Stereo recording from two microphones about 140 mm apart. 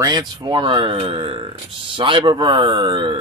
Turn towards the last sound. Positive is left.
turn(degrees=-35)  # may be behind; listen again after turning